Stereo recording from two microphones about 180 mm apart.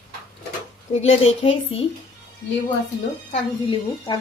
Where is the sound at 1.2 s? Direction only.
30° left (ahead or behind).